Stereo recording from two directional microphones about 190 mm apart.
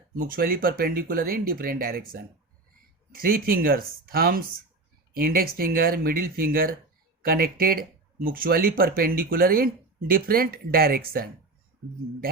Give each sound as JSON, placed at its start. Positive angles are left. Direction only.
{"t": 0.2, "sound": "speech", "side_deg": -50}
{"t": 3.1, "sound": "speech", "side_deg": -50}